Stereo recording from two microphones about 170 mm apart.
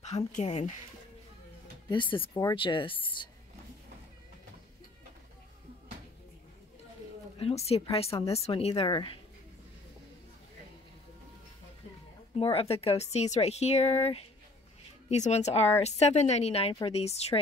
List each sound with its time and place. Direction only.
0.0 s speech: 40° left (ahead or behind)
1.9 s speech: 30° left (ahead or behind)
7.3 s speech: 35° left (ahead or behind)
12.4 s speech: 35° left (ahead or behind)